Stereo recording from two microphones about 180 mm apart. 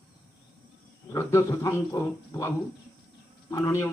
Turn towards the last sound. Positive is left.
turn(degrees=15)  # may be behind; listen again after turning